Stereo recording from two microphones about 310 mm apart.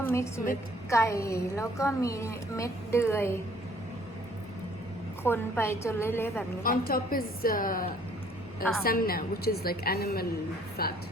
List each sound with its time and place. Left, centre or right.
0.0 s a woman's voice: centre
5.2 s a woman's voice: centre
6.6 s a woman's voice: left